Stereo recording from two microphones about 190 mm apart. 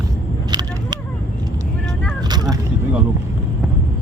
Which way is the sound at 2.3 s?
20° right (ahead or behind).